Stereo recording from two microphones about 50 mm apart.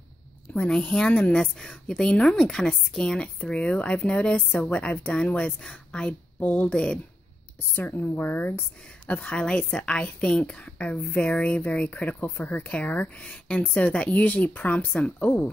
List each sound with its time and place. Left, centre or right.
0.7 s a woman's voice: centre
1.0 s speech: left
1.3 s a woman's voice: centre
3.4 s speech: left
4.5 s a woman's voice: left
5.1 s speech: left
6.4 s a woman's voice: left
6.7 s speech: centre
7.7 s speech: left
9.0 s speech: left